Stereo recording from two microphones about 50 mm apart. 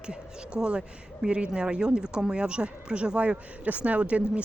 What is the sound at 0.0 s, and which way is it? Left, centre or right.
Speech, centre.